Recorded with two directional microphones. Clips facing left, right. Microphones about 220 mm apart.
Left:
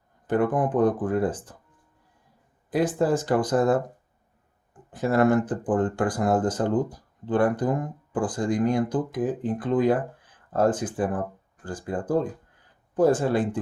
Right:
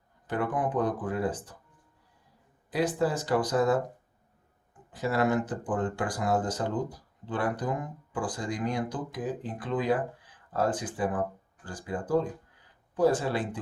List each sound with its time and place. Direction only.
0.3 s speech: 50° left (ahead or behind)
2.6 s speech: 50° left (ahead or behind)
4.9 s speech: 50° left (ahead or behind)